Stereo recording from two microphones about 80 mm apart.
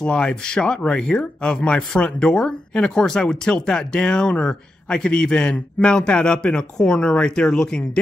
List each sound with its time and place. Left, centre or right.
0.0 s speech: centre